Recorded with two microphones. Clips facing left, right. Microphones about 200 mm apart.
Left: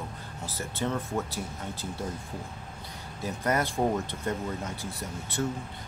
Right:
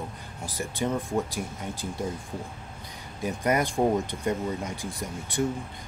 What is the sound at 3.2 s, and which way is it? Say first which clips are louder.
Speech: right 3 dB; 15° right (ahead or behind).